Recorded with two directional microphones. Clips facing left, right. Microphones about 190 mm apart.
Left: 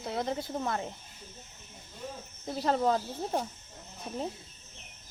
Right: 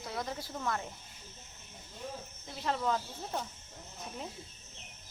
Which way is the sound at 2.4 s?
40° left (ahead or behind).